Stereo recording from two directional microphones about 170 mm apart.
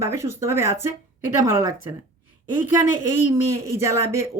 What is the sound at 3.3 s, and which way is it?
Speech, 15° right (ahead or behind).